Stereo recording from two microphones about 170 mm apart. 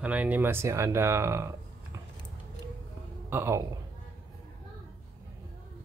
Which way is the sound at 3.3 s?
15° right (ahead or behind).